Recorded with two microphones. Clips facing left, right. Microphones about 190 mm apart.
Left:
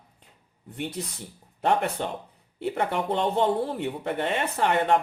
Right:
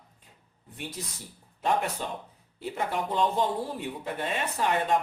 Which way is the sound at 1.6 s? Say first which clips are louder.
Left 3 dB; 60° left (ahead or behind).